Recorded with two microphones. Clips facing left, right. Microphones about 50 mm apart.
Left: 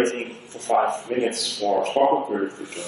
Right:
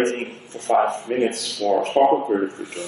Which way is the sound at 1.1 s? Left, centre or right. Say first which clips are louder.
Right 2 dB; right.